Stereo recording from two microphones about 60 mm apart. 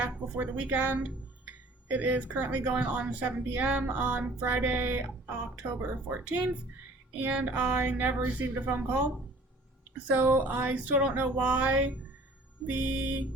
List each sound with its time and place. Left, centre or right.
0.0 s speech: right
10.1 s speech: right